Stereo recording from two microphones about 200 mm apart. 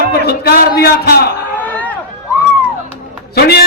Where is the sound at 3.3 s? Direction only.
55° left (ahead or behind).